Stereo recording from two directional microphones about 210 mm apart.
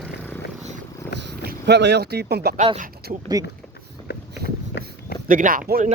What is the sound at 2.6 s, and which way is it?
Speech, 35° right (ahead or behind).